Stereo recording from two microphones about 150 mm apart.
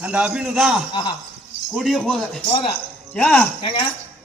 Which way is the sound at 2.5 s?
35° left (ahead or behind).